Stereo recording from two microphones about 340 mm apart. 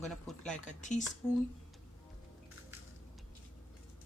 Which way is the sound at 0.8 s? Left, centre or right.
Left.